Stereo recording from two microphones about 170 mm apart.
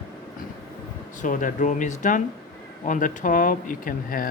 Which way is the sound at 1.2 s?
50° left (ahead or behind).